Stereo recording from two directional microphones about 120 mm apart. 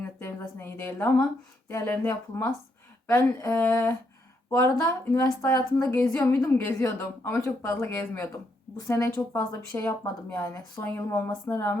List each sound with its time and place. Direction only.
0.2 s a woman's voice: 20° left (ahead or behind)
10.8 s speech: 15° left (ahead or behind)